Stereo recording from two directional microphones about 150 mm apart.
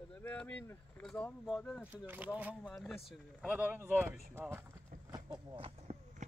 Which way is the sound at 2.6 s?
Centre (ahead or behind).